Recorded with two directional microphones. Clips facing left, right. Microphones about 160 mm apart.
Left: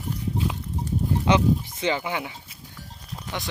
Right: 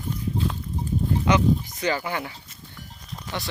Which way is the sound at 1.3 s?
30° left (ahead or behind).